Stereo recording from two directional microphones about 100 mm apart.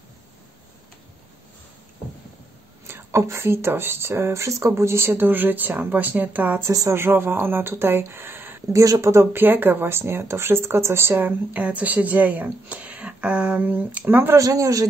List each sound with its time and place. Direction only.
2.9 s speech: 25° right (ahead or behind)
6.7 s speech: 30° right (ahead or behind)
8.7 s speech: 35° right (ahead or behind)
14.4 s a man's voice: 35° right (ahead or behind)